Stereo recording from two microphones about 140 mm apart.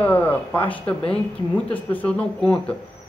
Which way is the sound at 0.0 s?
10° left (ahead or behind).